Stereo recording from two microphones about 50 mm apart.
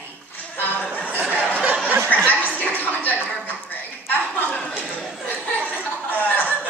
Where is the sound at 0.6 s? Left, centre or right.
Left.